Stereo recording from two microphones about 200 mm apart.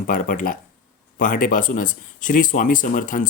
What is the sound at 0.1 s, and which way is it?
Speech, 45° left (ahead or behind).